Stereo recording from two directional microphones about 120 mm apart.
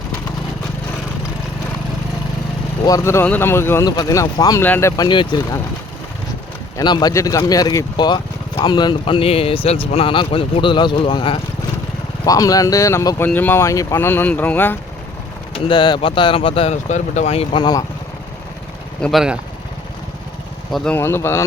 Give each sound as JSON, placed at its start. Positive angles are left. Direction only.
{"t": 2.8, "sound": "speech", "side_deg": 25}
{"t": 3.8, "sound": "speech", "side_deg": 30}
{"t": 5.0, "sound": "speech", "side_deg": 40}
{"t": 6.7, "sound": "speech", "side_deg": 35}
{"t": 12.2, "sound": "speech", "side_deg": 30}
{"t": 15.5, "sound": "speech", "side_deg": 45}
{"t": 16.9, "sound": "speech", "side_deg": 75}
{"t": 17.5, "sound": "speech", "side_deg": 35}
{"t": 19.0, "sound": "speech", "side_deg": -5}
{"t": 20.9, "sound": "speech", "side_deg": 20}